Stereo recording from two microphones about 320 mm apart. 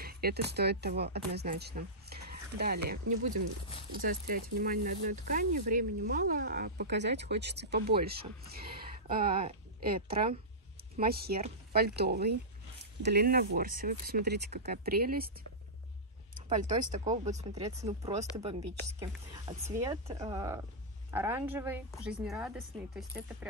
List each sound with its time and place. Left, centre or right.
0.0 s speech: right
3.1 s speech: right
3.9 s speech: right
16.3 s a woman's voice: right; by 23.3 s centre